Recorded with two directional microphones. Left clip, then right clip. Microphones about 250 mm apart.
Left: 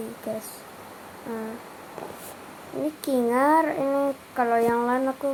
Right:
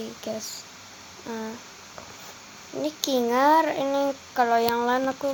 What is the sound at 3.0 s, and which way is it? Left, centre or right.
Speech, centre.